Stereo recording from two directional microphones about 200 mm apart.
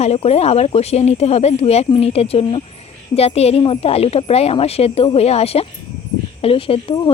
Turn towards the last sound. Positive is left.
turn(degrees=25)  # may be behind; listen again after turning